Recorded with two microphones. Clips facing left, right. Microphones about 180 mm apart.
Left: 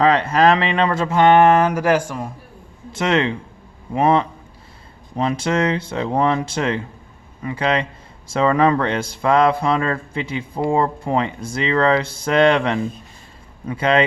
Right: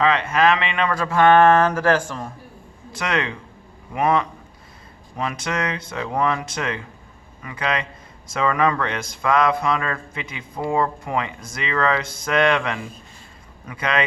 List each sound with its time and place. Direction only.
0.0 s speech: 35° left (ahead or behind); by 2.3 s 10° left (ahead or behind)
2.9 s speech: 25° left (ahead or behind)